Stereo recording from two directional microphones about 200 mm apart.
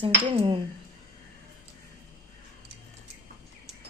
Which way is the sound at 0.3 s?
25° right (ahead or behind).